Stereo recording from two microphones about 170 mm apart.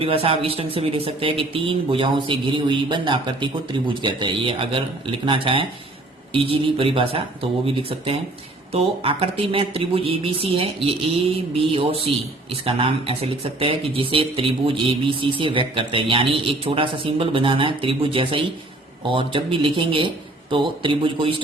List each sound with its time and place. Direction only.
0.0 s a man's voice: 35° right (ahead or behind)